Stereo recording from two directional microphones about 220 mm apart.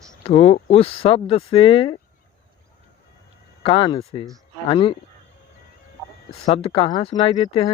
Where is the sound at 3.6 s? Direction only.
25° left (ahead or behind).